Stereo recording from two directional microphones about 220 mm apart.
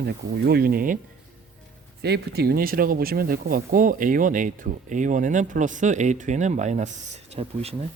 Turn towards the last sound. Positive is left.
turn(degrees=-30)  # may be behind; listen again after turning